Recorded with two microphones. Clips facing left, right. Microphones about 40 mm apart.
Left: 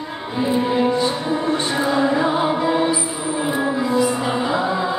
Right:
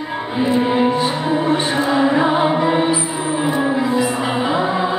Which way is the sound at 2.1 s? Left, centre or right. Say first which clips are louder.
Right 3 dB; right.